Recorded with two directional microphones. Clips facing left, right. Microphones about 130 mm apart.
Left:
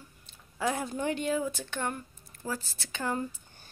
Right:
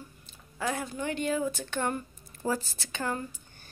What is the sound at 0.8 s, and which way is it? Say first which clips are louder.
Speech: left 2 dB; 30° left (ahead or behind).